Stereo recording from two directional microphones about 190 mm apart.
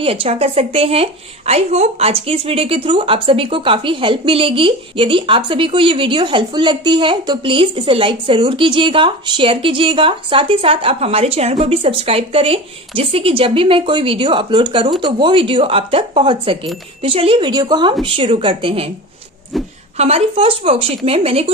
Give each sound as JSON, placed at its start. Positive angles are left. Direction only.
{"t": 0.0, "sound": "a woman's voice", "side_deg": -30}
{"t": 20.0, "sound": "a woman's voice", "side_deg": -30}